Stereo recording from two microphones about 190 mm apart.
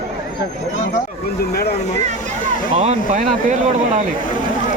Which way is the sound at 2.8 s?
35° right (ahead or behind).